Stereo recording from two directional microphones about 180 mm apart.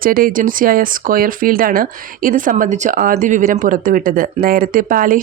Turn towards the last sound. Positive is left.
turn(degrees=-50)  # may be behind; listen again after turning